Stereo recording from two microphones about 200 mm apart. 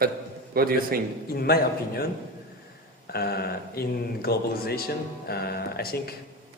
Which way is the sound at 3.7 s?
50° left (ahead or behind).